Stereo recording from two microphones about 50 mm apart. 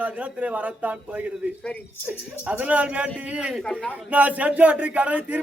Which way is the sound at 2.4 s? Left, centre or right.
Right.